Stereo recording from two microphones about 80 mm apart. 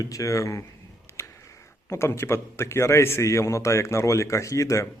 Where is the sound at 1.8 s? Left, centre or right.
Left.